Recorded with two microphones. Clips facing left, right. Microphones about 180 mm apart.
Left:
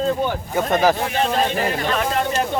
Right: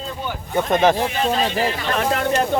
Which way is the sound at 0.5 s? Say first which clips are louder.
Right 2 dB; centre (ahead or behind).